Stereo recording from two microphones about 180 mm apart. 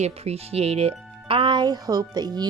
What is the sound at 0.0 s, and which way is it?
Speech, 35° right (ahead or behind).